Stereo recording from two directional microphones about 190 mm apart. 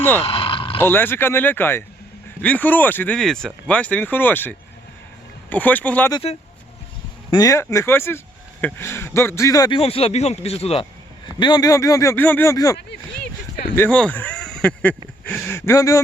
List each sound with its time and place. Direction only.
0.2 s vehicle: 30° left (ahead or behind)
0.8 s speech: 10° left (ahead or behind)
7.3 s a man's voice: 20° left (ahead or behind)
13.7 s speech: 10° left (ahead or behind)